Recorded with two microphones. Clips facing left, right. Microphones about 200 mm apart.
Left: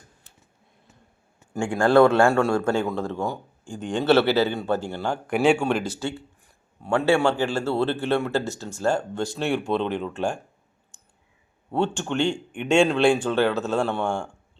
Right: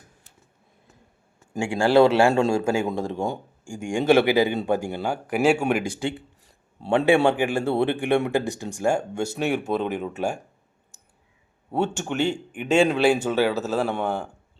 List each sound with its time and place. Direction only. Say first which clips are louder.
1.6 s speech: even; 10° right (ahead or behind)
2.2 s speech: even; 20° right (ahead or behind)
6.7 s a man's voice: right 2 dB; 30° right (ahead or behind)
7.0 s speech: right 2 dB; 15° right (ahead or behind)
11.7 s speech: left 1 dB; 10° right (ahead or behind)